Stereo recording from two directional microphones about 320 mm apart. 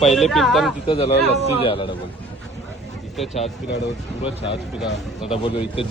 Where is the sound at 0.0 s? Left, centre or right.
Centre.